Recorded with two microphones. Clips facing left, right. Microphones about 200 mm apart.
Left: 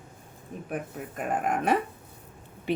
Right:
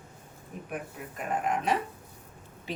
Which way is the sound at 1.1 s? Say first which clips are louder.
Left 2 dB; 50° left (ahead or behind).